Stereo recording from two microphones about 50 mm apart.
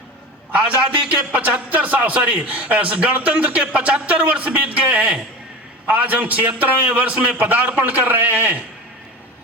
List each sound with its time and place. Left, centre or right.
0.5 s a man's voice: right